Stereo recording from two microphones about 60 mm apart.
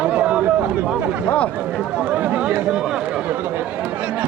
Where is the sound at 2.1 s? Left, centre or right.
Right.